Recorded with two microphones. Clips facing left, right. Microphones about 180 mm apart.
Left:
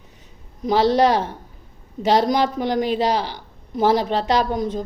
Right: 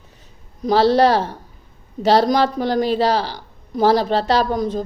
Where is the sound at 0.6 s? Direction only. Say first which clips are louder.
Right 2 dB; 15° left (ahead or behind).